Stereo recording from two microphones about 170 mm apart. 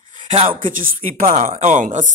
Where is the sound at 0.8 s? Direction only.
45° right (ahead or behind).